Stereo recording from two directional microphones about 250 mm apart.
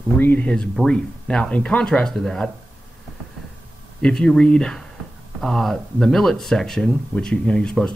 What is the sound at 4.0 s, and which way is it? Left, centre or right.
Speech, centre.